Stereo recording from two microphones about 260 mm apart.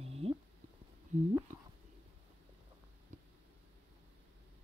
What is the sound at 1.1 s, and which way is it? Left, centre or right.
Speech, right.